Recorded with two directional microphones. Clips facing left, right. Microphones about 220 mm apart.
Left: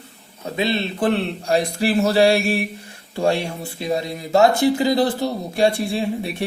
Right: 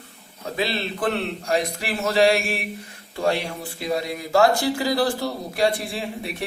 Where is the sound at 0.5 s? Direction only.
25° left (ahead or behind).